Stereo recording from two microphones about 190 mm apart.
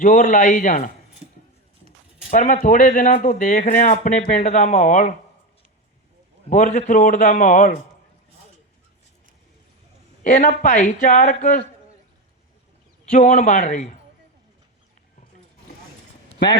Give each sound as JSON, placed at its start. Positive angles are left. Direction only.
{"t": 0.0, "sound": "speech", "side_deg": 45}
{"t": 2.3, "sound": "speech", "side_deg": 45}
{"t": 6.5, "sound": "speech", "side_deg": 45}
{"t": 10.2, "sound": "speech", "side_deg": 45}
{"t": 13.1, "sound": "a man's voice", "side_deg": 40}